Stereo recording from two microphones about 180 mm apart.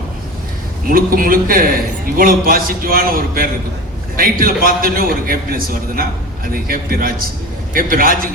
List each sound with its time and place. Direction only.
0.9 s a man's voice: 55° right (ahead or behind)